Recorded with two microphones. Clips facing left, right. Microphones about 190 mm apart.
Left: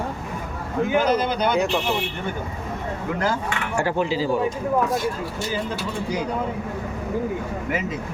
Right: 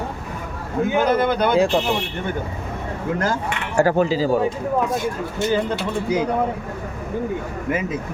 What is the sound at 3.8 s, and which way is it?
Speech, 40° right (ahead or behind).